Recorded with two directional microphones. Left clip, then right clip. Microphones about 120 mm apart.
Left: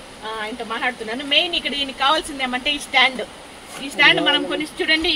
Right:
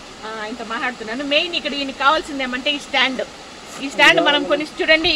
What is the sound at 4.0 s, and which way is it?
Speech, 45° right (ahead or behind).